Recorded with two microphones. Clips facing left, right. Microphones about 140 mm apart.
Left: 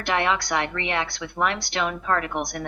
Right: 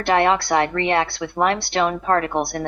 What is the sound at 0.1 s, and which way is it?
A woman's voice, 40° right (ahead or behind).